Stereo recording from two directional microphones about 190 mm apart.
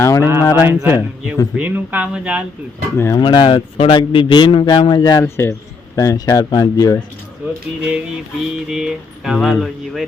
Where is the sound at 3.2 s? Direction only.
25° left (ahead or behind).